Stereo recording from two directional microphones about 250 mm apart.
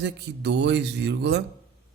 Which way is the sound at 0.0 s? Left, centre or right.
Right.